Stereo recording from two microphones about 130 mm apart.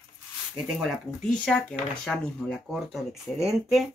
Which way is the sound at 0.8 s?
Centre (ahead or behind).